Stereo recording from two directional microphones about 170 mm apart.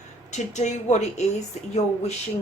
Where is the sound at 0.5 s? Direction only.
45° left (ahead or behind).